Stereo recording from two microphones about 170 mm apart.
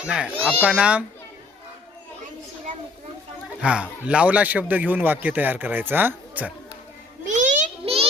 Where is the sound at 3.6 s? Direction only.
5° right (ahead or behind).